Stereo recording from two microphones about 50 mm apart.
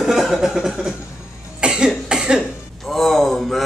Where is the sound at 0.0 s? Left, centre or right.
Centre.